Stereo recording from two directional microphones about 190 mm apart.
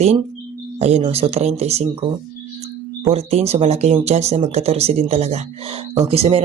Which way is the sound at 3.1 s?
35° right (ahead or behind).